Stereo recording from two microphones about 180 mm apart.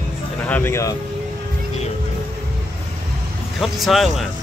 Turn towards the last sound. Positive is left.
turn(degrees=0)  # may be behind; listen again after turning